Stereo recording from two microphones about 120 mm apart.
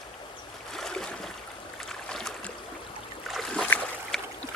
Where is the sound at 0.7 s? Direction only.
5° left (ahead or behind).